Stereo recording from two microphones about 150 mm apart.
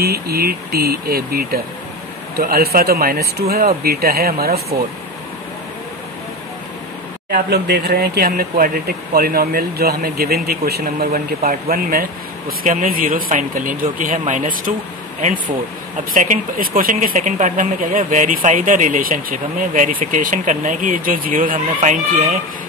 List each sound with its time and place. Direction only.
0.0 s speech: 90° right
7.2 s speech: 90° right; by 22.4 s 65° right (ahead or behind)